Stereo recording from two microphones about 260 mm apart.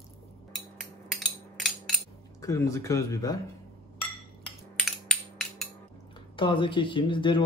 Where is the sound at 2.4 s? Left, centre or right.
Centre.